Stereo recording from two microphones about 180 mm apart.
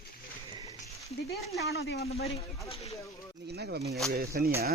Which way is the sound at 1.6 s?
65° left (ahead or behind).